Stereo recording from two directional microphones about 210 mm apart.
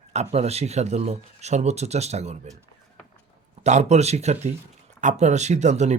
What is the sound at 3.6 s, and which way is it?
Speech, 30° right (ahead or behind).